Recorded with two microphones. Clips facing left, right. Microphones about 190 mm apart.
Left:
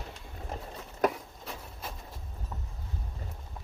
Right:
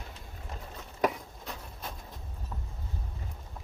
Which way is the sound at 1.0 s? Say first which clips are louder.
Left 1 dB; 5° left (ahead or behind).